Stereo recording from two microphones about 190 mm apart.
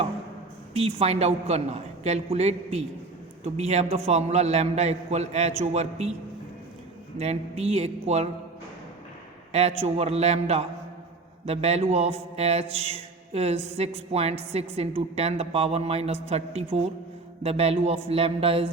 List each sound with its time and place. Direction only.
0.7 s mantra: 30° right (ahead or behind)
7.2 s mantra: 35° right (ahead or behind)
9.5 s a man's voice: 35° right (ahead or behind)
9.8 s mantra: 35° right (ahead or behind)